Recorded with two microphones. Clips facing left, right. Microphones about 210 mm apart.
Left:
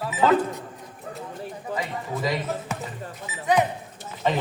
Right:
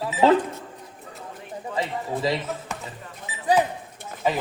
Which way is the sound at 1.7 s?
30° right (ahead or behind).